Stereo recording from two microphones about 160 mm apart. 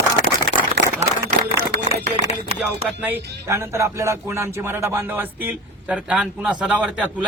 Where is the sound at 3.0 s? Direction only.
15° right (ahead or behind).